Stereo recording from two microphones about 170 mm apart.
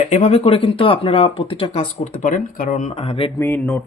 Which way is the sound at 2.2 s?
50° left (ahead or behind).